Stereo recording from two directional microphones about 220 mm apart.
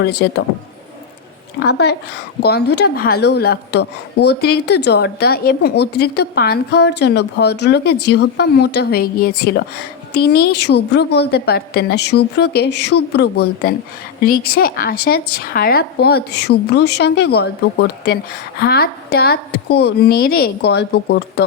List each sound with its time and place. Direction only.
0.0 s a woman's voice: 50° left (ahead or behind)
1.5 s a woman's voice: 50° left (ahead or behind)